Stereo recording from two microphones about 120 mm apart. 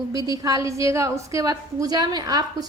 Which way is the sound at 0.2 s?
30° right (ahead or behind).